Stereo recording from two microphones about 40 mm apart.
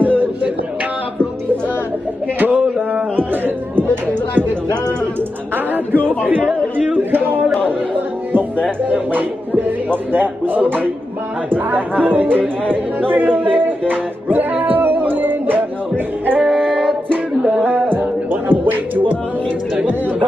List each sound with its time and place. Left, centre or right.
2.4 s a sound: right
3.2 s chatter: right
7.1 s a sound: right
9.8 s a man's voice: right
16.3 s female singing: centre
16.6 s music: centre
17.5 s music: right
17.9 s music: right